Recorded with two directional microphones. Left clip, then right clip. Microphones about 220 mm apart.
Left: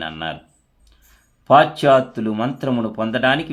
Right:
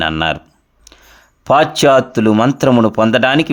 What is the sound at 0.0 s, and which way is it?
Speech, 50° right (ahead or behind).